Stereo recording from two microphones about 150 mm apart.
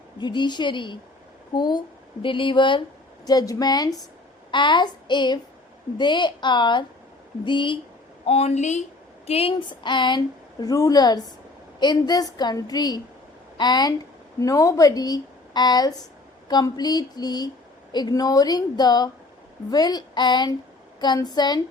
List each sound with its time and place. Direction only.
0.2 s a woman's voice: 30° left (ahead or behind)